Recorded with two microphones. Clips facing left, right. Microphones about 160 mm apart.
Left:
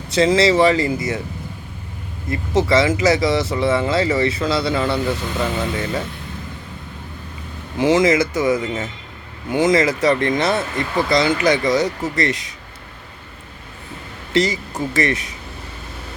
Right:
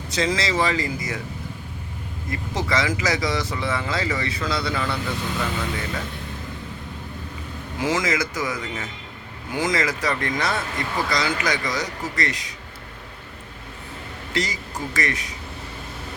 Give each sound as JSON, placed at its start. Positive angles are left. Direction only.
{"t": 0.1, "sound": "speech", "side_deg": 30}
{"t": 2.3, "sound": "speech", "side_deg": 25}
{"t": 7.8, "sound": "speech", "side_deg": 25}
{"t": 14.3, "sound": "speech", "side_deg": 25}